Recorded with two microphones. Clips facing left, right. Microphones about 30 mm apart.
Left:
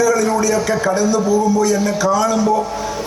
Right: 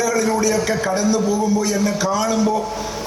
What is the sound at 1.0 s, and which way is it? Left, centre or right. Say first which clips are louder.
A man's voice: left 3 dB; centre.